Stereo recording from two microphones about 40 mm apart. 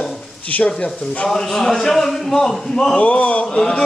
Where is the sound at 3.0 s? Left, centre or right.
Left.